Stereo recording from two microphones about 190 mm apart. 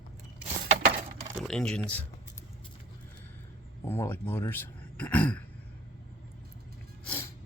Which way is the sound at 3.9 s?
10° left (ahead or behind).